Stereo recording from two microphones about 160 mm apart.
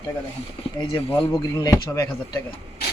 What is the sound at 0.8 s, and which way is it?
Speech, 25° left (ahead or behind).